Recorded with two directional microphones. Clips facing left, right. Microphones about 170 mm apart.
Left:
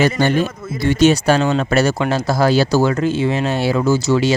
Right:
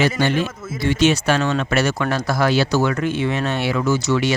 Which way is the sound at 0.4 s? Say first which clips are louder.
Left 3 dB; 5° right (ahead or behind).